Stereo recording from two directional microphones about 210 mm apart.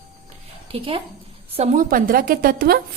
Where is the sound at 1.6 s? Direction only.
40° right (ahead or behind).